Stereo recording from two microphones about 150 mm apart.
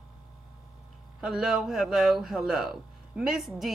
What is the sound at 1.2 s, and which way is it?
Speech, 5° right (ahead or behind).